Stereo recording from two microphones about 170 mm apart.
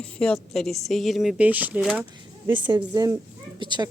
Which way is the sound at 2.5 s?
25° right (ahead or behind).